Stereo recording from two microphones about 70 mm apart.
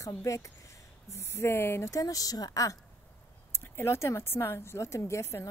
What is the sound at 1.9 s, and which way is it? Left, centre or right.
Speech, left.